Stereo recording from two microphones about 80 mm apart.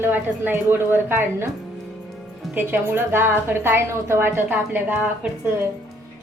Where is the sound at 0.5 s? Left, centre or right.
Right.